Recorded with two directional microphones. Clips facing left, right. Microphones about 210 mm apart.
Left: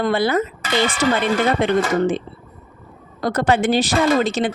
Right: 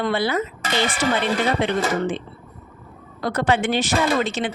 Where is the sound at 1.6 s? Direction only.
45° left (ahead or behind).